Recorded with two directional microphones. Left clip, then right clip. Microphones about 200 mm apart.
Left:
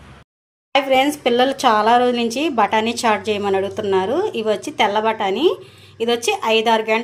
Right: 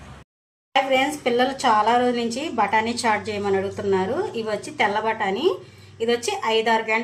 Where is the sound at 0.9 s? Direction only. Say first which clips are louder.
Left 5 dB; 50° left (ahead or behind).